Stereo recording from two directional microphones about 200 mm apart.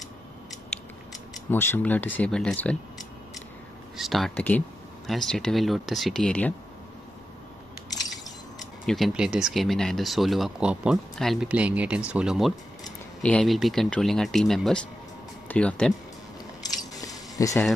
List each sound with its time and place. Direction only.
1.1 s speech: 10° left (ahead or behind)
3.9 s speech: centre (ahead or behind)
8.8 s speech: centre (ahead or behind)
16.9 s a sound: 15° left (ahead or behind)